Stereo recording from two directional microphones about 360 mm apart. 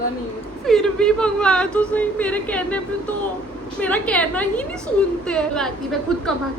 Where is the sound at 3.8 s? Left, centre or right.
Centre.